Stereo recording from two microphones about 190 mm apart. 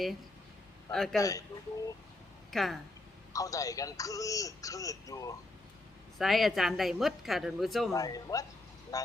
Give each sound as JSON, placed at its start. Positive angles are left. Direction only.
{"t": 0.9, "sound": "a woman's voice", "side_deg": 0}
{"t": 1.2, "sound": "speech", "side_deg": 15}
{"t": 2.5, "sound": "a woman's voice", "side_deg": 0}
{"t": 3.3, "sound": "speech", "side_deg": 15}
{"t": 6.1, "sound": "a woman's voice", "side_deg": 0}
{"t": 7.9, "sound": "speech", "side_deg": 20}